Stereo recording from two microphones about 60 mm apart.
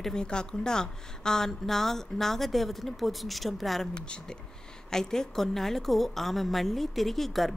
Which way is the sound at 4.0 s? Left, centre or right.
Centre.